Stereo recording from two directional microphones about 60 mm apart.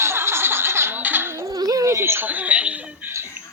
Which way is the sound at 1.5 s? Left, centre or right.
Right.